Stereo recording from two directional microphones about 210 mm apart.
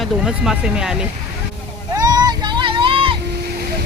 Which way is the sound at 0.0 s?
Centre (ahead or behind).